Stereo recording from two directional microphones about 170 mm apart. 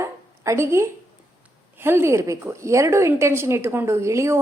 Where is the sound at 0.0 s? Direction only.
15° right (ahead or behind).